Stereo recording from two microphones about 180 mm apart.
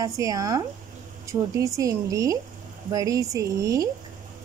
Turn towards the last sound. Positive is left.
turn(degrees=-20)  # may be behind; listen again after turning